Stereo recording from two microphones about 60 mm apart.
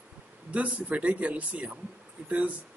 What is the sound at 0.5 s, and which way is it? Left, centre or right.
Speech, right.